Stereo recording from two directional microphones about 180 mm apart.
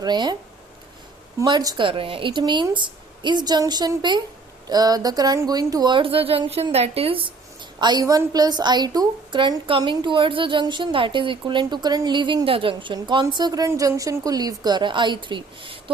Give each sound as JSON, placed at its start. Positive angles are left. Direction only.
{"t": 0.0, "sound": "a woman's voice", "side_deg": -25}
{"t": 1.4, "sound": "a woman's voice", "side_deg": -20}